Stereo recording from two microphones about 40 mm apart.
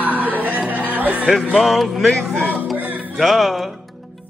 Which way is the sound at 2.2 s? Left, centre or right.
Centre.